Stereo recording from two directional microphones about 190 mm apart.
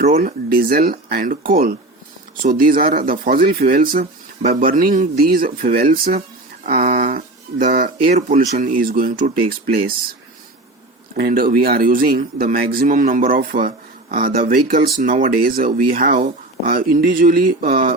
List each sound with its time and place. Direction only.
0.2 s speech: 50° right (ahead or behind)
11.2 s speech: 50° right (ahead or behind)